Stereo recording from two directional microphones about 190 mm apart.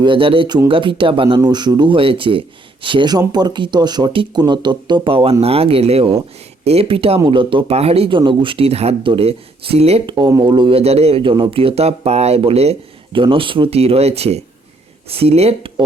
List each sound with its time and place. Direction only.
0.0 s speech: 25° right (ahead or behind)